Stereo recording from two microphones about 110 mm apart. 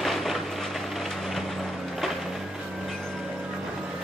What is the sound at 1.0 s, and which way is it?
Vehicle, centre (ahead or behind).